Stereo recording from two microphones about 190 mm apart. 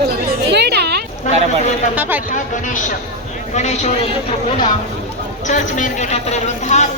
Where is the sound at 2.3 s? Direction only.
40° left (ahead or behind).